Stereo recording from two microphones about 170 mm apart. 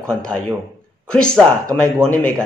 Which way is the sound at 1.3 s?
15° right (ahead or behind).